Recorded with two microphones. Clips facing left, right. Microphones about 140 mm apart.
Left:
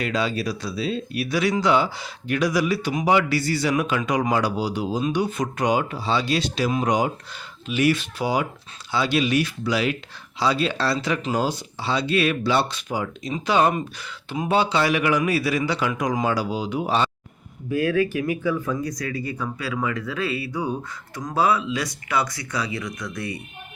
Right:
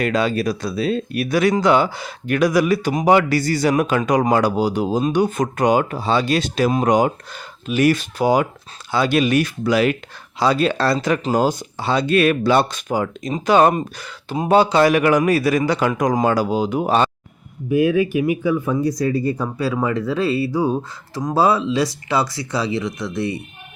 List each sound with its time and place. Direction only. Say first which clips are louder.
0.0 s speech: right 5 dB; 55° right (ahead or behind)
17.7 s speech: right 5 dB; 15° right (ahead or behind)
18.7 s speech: right 8 dB; 30° right (ahead or behind)